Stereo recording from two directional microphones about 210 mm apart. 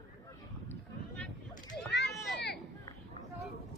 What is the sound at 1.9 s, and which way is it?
Children playing, 55° left (ahead or behind).